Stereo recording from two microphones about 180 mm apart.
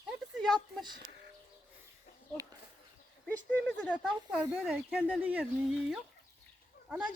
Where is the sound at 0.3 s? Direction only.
Centre (ahead or behind).